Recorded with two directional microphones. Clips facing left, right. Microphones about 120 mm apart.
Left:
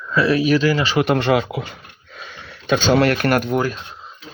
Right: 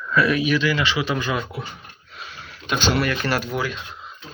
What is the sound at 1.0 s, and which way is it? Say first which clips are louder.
Speech: left 7 dB; 65° left (ahead or behind).